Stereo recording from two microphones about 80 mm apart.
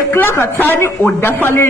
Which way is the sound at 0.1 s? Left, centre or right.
Left.